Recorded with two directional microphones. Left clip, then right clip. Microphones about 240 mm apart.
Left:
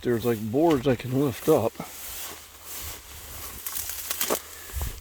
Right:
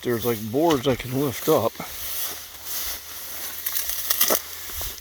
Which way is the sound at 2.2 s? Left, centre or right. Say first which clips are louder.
Right 6 dB; right.